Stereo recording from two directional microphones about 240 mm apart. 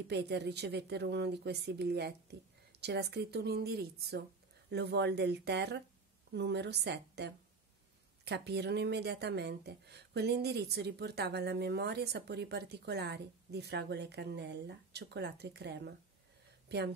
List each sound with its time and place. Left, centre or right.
0.1 s speech: right